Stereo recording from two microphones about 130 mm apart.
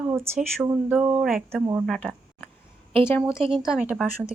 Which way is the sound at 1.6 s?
20° right (ahead or behind).